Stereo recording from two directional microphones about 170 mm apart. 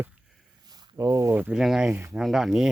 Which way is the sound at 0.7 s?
20° right (ahead or behind).